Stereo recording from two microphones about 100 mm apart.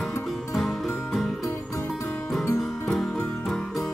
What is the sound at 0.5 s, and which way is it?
Music, centre (ahead or behind).